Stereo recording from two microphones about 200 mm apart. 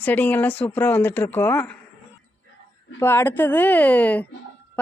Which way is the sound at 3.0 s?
10° left (ahead or behind).